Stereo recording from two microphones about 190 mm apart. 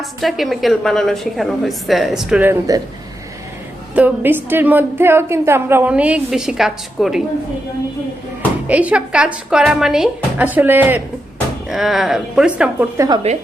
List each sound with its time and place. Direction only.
0.0 s a woman's voice: centre (ahead or behind)
3.9 s a woman's voice: 10° right (ahead or behind)
8.6 s a woman's voice: 5° right (ahead or behind)
13.3 s a woman's voice: 35° right (ahead or behind)